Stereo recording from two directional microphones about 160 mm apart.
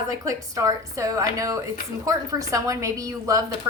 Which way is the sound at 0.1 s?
20° right (ahead or behind).